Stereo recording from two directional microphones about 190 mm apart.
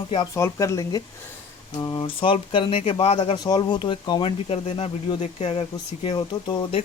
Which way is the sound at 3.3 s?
20° left (ahead or behind).